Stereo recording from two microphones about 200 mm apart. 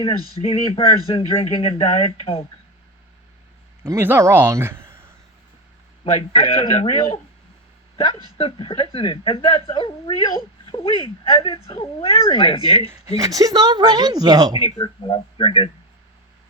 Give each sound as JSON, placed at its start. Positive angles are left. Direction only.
{"t": 0.2, "sound": "speech", "side_deg": -20}
{"t": 0.4, "sound": "speech", "side_deg": 25}
{"t": 3.8, "sound": "a man's voice", "side_deg": -10}
{"t": 6.1, "sound": "speech", "side_deg": 30}
{"t": 8.4, "sound": "speech", "side_deg": 25}
{"t": 12.9, "sound": "speech", "side_deg": -15}
{"t": 14.6, "sound": "speech", "side_deg": 25}